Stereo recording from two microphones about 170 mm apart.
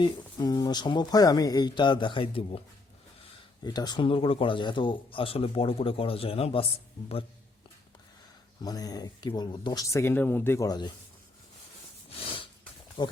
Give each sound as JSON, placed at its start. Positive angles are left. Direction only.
{"t": 0.0, "sound": "speech", "side_deg": 20}
{"t": 3.6, "sound": "speech", "side_deg": 25}
{"t": 8.6, "sound": "speech", "side_deg": 20}
{"t": 13.0, "sound": "speech", "side_deg": 30}